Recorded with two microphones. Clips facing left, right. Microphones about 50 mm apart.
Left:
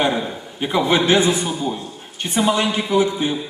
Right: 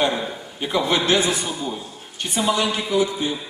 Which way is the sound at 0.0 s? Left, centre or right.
Centre.